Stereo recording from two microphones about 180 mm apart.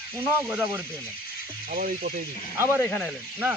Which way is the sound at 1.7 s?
50° right (ahead or behind).